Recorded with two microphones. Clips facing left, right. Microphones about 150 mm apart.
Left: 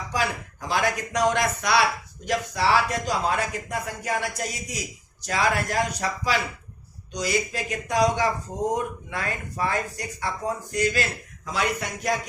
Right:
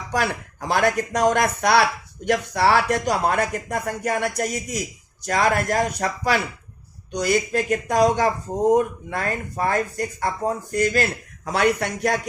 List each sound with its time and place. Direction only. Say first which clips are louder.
0.1 s speech: right 4 dB; 60° right (ahead or behind)
11.4 s speech: right 7 dB; 60° right (ahead or behind)